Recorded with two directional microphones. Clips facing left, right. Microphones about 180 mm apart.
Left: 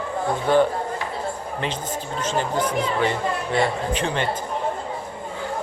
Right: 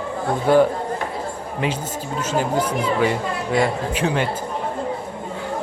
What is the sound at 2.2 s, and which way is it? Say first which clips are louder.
Speech: right 3 dB; 10° right (ahead or behind).